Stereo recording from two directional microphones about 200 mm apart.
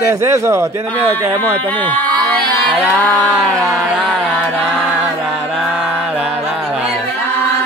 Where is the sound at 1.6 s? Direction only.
10° left (ahead or behind).